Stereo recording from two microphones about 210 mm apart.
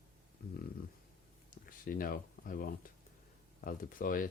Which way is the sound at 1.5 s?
40° left (ahead or behind).